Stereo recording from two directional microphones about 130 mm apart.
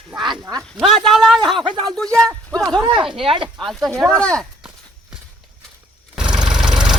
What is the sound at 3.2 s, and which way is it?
Speech, 40° right (ahead or behind).